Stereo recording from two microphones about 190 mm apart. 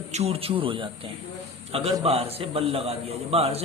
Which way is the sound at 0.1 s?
35° right (ahead or behind).